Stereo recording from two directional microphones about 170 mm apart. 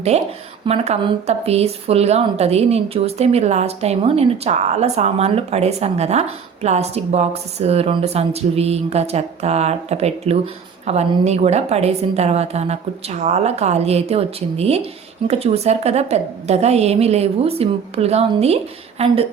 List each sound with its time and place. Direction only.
0.6 s speech: 40° right (ahead or behind)